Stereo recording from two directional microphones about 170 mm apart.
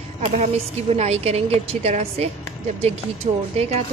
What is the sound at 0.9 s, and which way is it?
A woman's voice, 40° right (ahead or behind).